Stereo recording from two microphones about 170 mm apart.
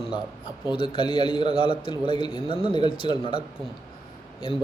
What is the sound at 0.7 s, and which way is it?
A man's voice, 30° left (ahead or behind).